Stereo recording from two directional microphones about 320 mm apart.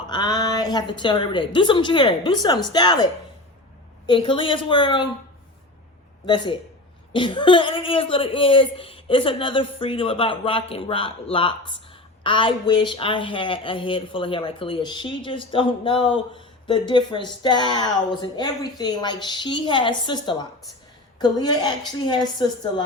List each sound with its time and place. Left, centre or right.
0.1 s a woman's voice: centre
6.2 s a woman's voice: centre